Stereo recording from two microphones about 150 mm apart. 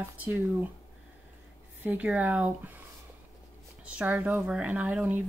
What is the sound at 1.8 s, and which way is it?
Speech, 10° right (ahead or behind).